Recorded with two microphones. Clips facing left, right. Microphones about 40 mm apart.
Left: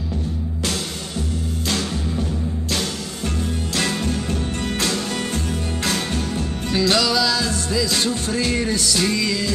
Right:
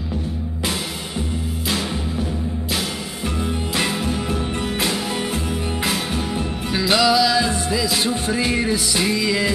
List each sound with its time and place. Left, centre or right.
3.7 s music: centre